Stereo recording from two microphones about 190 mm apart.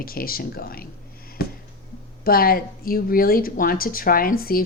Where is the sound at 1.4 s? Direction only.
55° left (ahead or behind).